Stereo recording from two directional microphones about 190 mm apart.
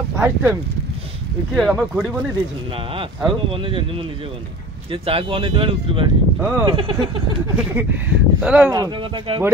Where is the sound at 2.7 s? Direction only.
30° right (ahead or behind).